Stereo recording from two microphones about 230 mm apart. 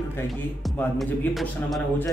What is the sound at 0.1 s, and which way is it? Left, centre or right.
A man's voice, centre.